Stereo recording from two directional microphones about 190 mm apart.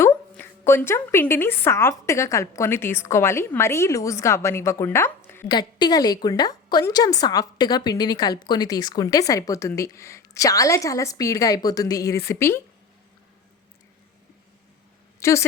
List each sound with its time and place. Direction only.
0.0 s a woman's voice: 10° left (ahead or behind)
15.2 s a woman's voice: 15° left (ahead or behind)